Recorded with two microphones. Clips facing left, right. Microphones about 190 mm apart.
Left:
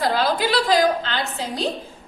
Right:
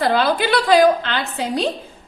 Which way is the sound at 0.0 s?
60° right (ahead or behind).